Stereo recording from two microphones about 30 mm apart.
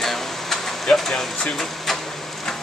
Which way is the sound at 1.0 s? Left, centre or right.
Centre.